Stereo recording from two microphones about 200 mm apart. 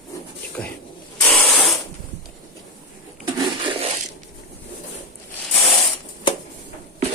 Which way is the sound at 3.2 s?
20° right (ahead or behind).